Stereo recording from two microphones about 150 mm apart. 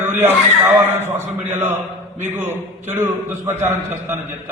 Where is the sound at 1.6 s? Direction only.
15° right (ahead or behind).